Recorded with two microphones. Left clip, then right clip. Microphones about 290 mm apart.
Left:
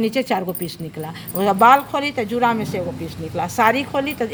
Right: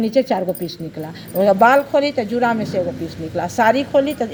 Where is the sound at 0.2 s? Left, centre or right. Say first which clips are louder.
Right 4 dB; left.